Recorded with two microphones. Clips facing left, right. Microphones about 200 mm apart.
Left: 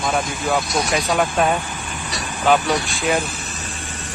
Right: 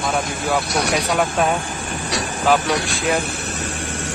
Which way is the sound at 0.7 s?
65° right (ahead or behind).